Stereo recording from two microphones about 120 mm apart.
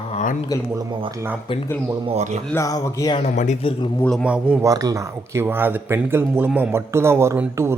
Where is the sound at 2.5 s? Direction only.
30° left (ahead or behind).